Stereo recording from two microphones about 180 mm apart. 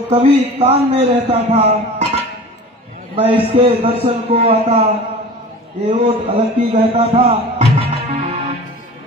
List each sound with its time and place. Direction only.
0.1 s a man's voice: 35° right (ahead or behind)
3.2 s a man's voice: 30° right (ahead or behind)
6.0 s a man's voice: 35° right (ahead or behind)